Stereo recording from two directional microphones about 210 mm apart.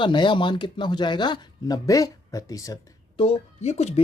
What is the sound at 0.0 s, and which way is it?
Speech, 20° left (ahead or behind).